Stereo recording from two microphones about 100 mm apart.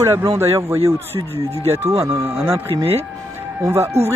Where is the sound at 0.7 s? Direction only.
75° right (ahead or behind).